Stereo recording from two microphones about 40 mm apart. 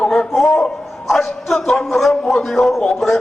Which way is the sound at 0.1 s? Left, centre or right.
Centre.